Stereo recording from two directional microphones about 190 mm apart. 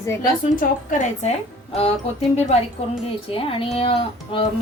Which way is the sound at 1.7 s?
30° left (ahead or behind).